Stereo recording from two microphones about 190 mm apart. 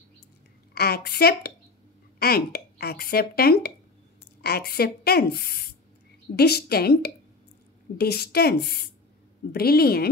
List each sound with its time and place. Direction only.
0.7 s speech: 55° left (ahead or behind)